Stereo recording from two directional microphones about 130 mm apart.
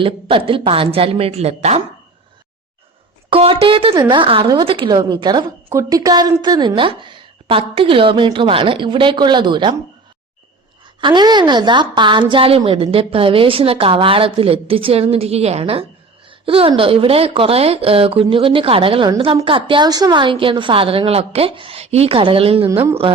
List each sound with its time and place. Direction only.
0.0 s a woman's voice: 45° right (ahead or behind)
3.3 s a woman's voice: 50° right (ahead or behind)
11.0 s a woman's voice: 35° right (ahead or behind)